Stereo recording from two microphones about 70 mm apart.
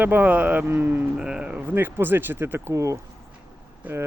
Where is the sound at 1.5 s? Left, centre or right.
Right.